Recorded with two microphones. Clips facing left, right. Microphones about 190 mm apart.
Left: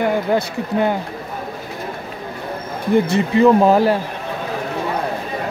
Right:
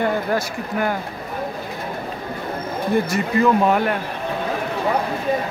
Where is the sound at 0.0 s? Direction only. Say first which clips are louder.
Left 3 dB; 20° left (ahead or behind).